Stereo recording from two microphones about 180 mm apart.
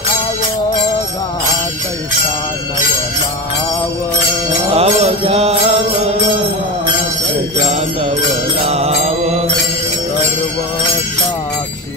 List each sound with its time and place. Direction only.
4.7 s mantra: 35° right (ahead or behind)
8.2 s mantra: 35° right (ahead or behind)